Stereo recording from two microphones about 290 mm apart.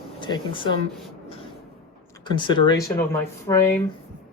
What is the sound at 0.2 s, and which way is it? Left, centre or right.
Speech, centre.